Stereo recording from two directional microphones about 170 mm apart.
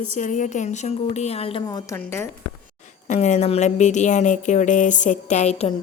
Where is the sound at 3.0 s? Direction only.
45° left (ahead or behind).